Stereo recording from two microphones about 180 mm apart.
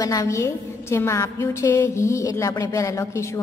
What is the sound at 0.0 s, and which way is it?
A woman's voice, 20° left (ahead or behind).